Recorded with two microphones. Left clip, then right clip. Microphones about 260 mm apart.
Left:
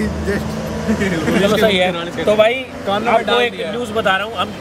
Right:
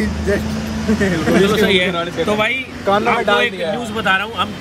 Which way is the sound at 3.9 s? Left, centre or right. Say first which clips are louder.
Left 2 dB; centre.